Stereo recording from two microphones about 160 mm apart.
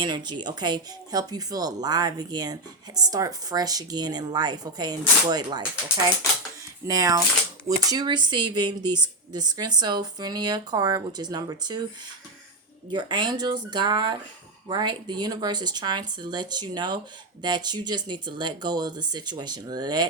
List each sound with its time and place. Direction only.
0.0 s speech: 30° right (ahead or behind)
6.8 s speech: 20° right (ahead or behind)
12.9 s speech: 30° right (ahead or behind)